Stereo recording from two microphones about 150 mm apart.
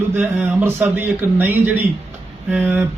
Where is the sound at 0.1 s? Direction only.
10° right (ahead or behind).